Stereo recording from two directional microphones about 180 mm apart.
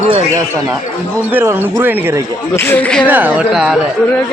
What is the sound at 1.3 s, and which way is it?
Speech, 10° right (ahead or behind).